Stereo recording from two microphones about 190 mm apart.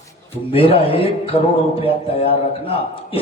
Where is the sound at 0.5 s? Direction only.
30° left (ahead or behind).